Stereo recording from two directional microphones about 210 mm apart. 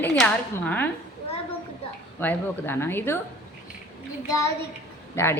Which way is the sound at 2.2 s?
10° left (ahead or behind).